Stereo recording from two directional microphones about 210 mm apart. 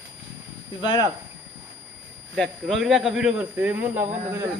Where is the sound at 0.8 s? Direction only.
20° left (ahead or behind).